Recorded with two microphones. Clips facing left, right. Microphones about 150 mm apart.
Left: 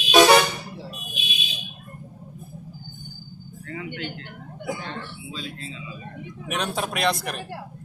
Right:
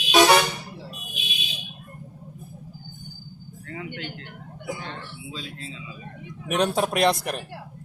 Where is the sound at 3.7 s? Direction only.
40° right (ahead or behind).